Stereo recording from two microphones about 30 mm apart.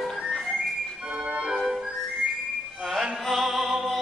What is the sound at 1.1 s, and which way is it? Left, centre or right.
Music, right.